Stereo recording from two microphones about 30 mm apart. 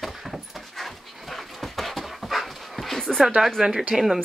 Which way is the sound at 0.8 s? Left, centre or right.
Centre.